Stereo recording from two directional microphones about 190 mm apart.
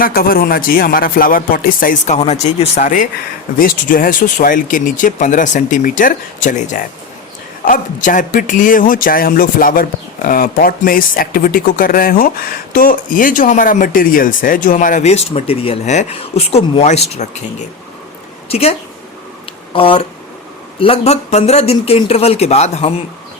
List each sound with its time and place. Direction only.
0.0 s a woman's voice: 50° left (ahead or behind); by 23.0 s 30° left (ahead or behind)